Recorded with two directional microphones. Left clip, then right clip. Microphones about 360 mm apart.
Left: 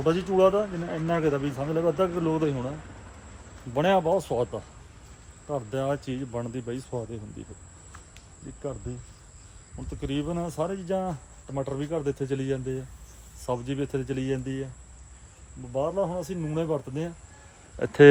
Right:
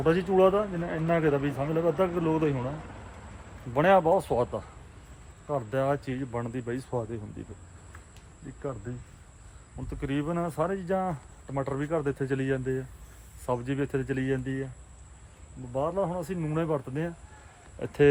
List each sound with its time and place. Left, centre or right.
0.0 s a man's voice: centre
3.8 s speech: centre
5.5 s speech: centre
10.0 s a man's voice: centre
15.7 s a man's voice: centre
17.7 s speech: left